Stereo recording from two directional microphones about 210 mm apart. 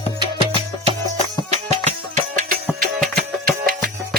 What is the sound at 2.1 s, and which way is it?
Music, 35° right (ahead or behind).